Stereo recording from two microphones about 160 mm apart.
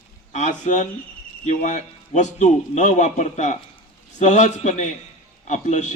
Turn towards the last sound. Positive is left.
turn(degrees=50)  # may be behind; listen again after turning